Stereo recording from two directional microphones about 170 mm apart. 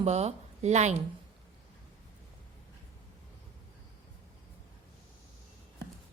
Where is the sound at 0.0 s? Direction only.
40° right (ahead or behind).